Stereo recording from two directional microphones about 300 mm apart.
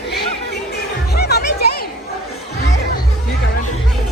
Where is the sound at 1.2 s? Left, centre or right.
Left.